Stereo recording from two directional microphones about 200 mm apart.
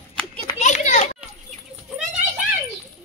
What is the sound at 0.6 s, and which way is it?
Children playing, 35° left (ahead or behind).